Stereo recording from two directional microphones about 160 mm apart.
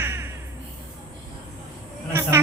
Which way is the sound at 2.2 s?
15° right (ahead or behind).